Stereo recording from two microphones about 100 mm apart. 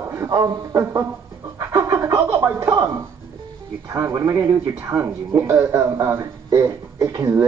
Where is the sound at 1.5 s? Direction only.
25° right (ahead or behind).